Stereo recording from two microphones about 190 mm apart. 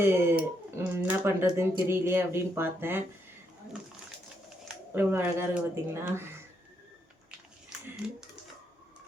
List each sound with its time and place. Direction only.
0.0 s speech: 10° right (ahead or behind)
4.9 s speech: 10° right (ahead or behind)
7.7 s a sound: centre (ahead or behind)